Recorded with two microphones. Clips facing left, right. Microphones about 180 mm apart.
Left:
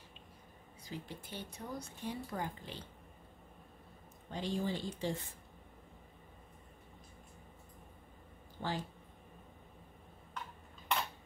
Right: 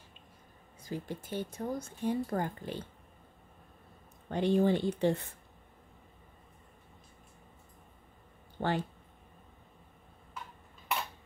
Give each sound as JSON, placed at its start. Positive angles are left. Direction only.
{"t": 0.8, "sound": "speech", "side_deg": -50}
{"t": 4.3, "sound": "speech", "side_deg": -60}
{"t": 8.5, "sound": "speech", "side_deg": -60}